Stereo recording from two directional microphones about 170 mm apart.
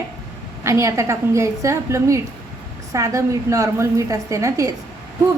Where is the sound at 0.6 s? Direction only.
15° right (ahead or behind).